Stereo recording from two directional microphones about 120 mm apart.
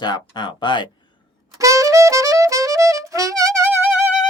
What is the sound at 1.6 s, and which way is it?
Music, 25° right (ahead or behind).